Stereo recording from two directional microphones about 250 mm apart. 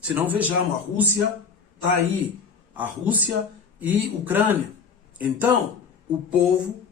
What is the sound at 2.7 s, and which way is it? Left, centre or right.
A man's voice, centre.